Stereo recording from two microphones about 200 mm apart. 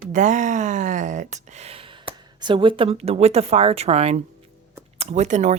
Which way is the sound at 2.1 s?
25° right (ahead or behind).